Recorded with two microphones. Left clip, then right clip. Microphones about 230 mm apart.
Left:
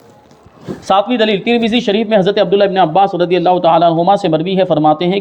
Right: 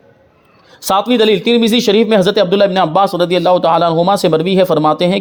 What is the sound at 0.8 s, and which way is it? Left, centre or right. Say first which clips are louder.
Speech: even; right.